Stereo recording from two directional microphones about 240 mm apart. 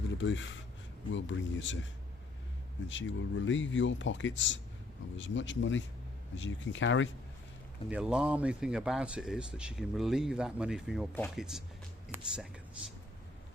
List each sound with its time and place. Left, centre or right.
0.2 s speech: left
7.9 s speech: centre